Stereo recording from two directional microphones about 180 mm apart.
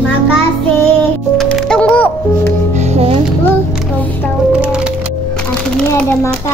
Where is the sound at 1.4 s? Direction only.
5° left (ahead or behind).